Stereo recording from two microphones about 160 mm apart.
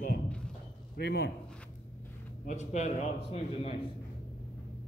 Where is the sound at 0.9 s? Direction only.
85° left.